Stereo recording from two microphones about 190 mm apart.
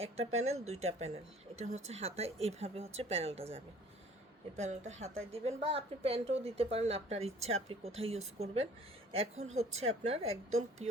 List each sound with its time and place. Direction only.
0.0 s a woman's voice: 35° right (ahead or behind)
4.5 s a woman's voice: 35° right (ahead or behind)